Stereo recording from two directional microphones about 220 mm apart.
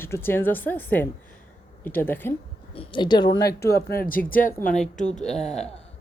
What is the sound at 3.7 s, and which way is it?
Speech, 45° left (ahead or behind).